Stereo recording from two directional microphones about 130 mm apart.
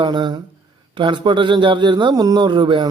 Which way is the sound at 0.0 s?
35° right (ahead or behind).